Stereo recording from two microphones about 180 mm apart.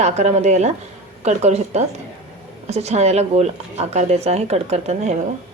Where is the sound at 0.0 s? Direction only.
40° right (ahead or behind).